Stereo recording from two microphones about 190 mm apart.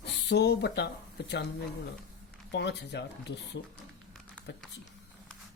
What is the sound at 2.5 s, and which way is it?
Speech, 65° left (ahead or behind).